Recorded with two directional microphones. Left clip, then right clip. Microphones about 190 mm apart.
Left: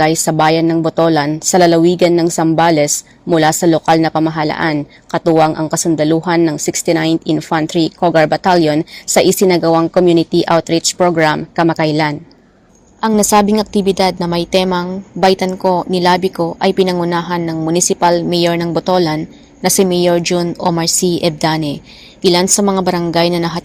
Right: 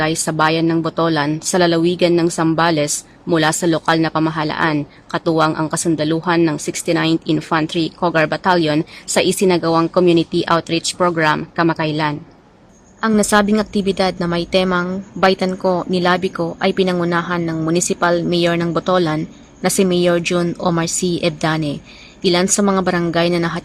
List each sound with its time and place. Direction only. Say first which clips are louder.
0.0 s a woman's voice: left 5 dB; 15° left (ahead or behind)
5.5 s a woman's voice: left 2 dB; centre (ahead or behind)
5.7 s a woman's voice: left 5 dB; 10° left (ahead or behind)
13.0 s a woman's voice: left 3 dB; centre (ahead or behind)